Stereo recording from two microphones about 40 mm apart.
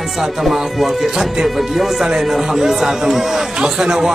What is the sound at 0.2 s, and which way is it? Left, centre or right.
Speech, centre.